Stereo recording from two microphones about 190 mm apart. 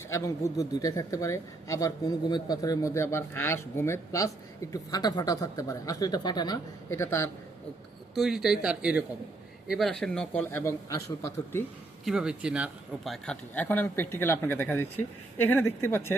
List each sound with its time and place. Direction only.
0.1 s a man's voice: 15° left (ahead or behind)
8.1 s a man's voice: centre (ahead or behind); by 11.6 s 15° left (ahead or behind)
12.0 s a man's voice: 5° right (ahead or behind); by 16.1 s 10° left (ahead or behind)